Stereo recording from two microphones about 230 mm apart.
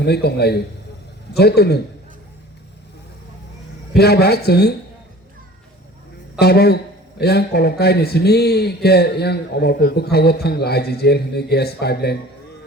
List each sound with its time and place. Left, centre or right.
0.0 s a man's voice: left
3.9 s a man's voice: left
6.4 s a man's voice: left